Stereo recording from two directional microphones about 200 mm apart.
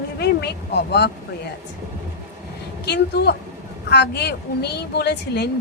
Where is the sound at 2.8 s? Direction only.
55° left (ahead or behind).